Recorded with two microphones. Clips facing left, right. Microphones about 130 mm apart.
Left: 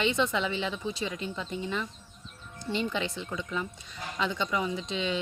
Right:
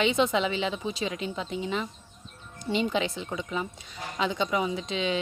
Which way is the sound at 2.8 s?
30° right (ahead or behind).